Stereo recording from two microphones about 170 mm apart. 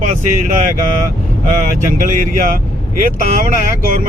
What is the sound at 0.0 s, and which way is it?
Speech, 50° right (ahead or behind).